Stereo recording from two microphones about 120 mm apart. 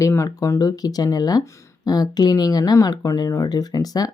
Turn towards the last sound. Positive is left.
turn(degrees=30)  # may be behind; listen again after turning